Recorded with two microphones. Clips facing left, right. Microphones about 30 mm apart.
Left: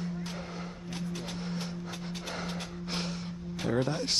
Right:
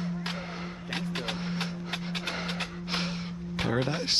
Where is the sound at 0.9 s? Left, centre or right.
Right.